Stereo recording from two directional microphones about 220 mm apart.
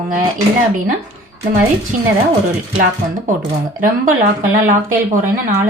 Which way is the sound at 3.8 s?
35° right (ahead or behind).